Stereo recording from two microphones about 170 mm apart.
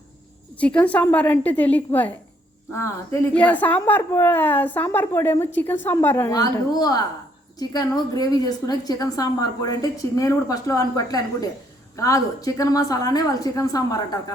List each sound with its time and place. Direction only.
0.6 s a woman's voice: 5° left (ahead or behind)